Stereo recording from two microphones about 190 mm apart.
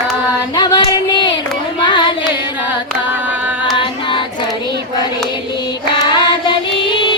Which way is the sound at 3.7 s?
25° left (ahead or behind).